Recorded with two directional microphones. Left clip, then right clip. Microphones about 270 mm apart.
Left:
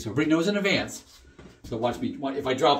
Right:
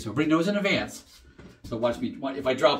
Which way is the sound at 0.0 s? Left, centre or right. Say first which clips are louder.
Even; centre.